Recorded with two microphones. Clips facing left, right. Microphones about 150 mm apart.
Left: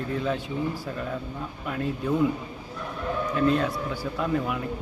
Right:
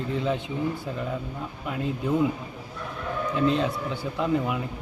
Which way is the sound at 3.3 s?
20° right (ahead or behind).